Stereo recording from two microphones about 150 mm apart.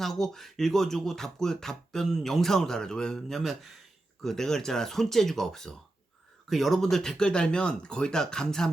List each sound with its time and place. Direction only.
0.0 s speech: centre (ahead or behind)